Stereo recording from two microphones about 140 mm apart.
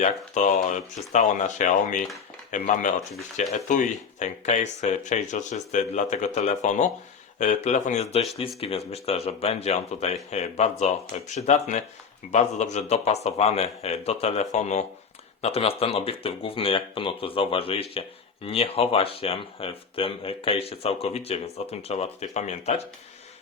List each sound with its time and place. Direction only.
0.0 s speech: 60° left (ahead or behind)